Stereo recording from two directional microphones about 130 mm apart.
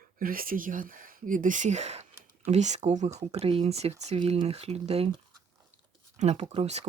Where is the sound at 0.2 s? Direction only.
90° right; by 3.1 s 65° right (ahead or behind).